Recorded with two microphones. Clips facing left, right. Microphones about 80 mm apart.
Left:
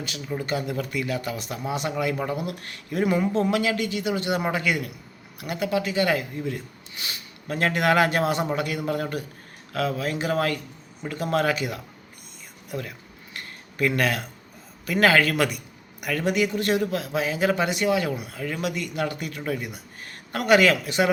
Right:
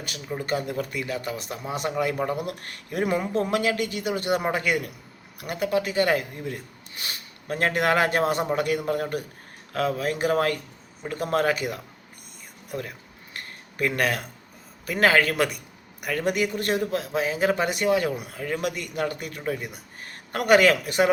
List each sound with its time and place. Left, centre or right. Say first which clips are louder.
0.3 s speech: even; right
13.7 s speech: left 1 dB; right